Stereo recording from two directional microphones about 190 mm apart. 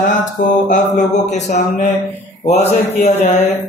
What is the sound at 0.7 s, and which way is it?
Mantra, 40° left (ahead or behind).